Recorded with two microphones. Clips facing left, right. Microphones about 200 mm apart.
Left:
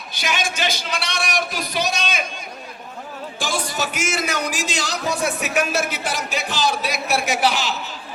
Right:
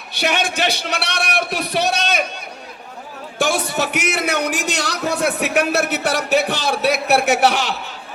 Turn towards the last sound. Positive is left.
turn(degrees=-60)  # may be behind; listen again after turning